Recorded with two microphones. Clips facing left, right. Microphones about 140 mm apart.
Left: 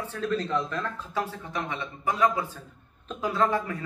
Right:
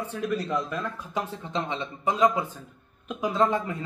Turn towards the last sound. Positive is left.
turn(degrees=-20)  # may be behind; listen again after turning